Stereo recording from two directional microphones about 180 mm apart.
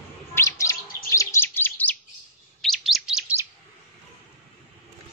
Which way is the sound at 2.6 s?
Centre (ahead or behind).